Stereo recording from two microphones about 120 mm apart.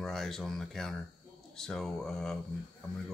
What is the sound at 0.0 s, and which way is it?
Speech, 5° left (ahead or behind).